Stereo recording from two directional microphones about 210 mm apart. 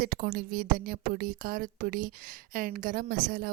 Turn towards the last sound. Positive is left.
turn(degrees=-40)  # may be behind; listen again after turning